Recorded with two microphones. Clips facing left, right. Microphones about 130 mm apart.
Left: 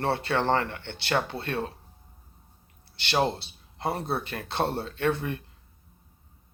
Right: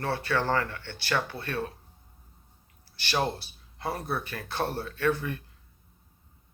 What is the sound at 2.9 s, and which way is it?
Speech, 25° left (ahead or behind).